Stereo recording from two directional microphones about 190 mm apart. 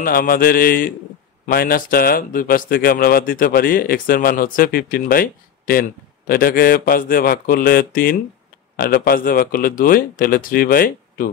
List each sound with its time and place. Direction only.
0.0 s speech: 50° left (ahead or behind)